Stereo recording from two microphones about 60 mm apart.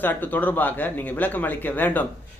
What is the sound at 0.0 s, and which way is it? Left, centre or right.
A man's voice, left.